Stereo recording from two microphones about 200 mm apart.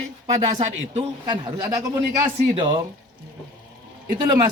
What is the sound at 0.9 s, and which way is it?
A man's voice, 20° right (ahead or behind).